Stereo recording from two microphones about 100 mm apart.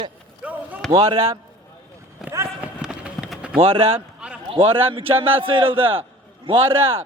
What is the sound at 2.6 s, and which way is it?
Run, 10° right (ahead or behind).